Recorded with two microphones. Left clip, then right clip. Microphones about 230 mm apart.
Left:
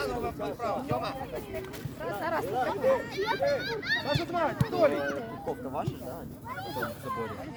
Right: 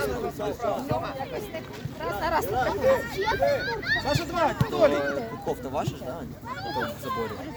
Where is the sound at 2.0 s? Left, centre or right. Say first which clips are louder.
Right 5 dB; right.